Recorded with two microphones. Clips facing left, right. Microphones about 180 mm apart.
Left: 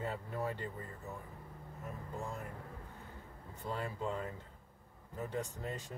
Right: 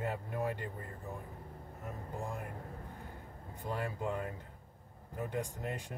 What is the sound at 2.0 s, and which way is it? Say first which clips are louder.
Speech: right 2 dB; 35° right (ahead or behind).